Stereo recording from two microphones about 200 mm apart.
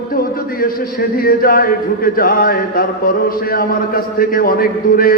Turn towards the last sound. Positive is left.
turn(degrees=45)  # may be behind; listen again after turning